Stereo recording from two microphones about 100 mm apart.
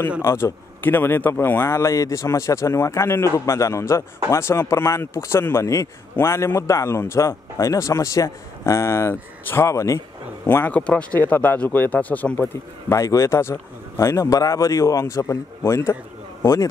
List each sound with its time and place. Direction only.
0.2 s speech: 25° left (ahead or behind)
10.4 s speech: 20° left (ahead or behind)
12.9 s speech: 30° left (ahead or behind)